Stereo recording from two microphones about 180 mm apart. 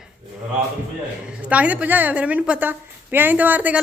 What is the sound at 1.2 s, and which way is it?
A woman's voice, 5° right (ahead or behind).